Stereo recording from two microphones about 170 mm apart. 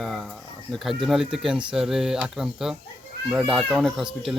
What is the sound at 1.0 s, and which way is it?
Speech, centre (ahead or behind).